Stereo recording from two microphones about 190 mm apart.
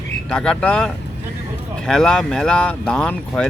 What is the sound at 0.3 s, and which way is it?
Speech, 5° left (ahead or behind).